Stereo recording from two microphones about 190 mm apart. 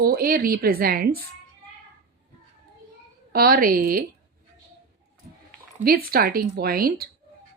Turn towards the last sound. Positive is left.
turn(degrees=-50)  # may be behind; listen again after turning